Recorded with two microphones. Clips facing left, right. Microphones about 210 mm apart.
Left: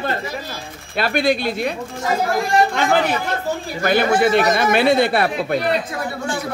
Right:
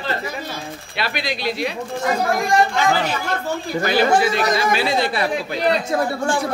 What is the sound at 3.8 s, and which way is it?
Speech, 55° left (ahead or behind).